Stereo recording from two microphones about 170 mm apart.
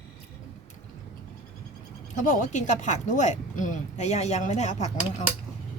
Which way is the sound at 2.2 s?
50° left (ahead or behind).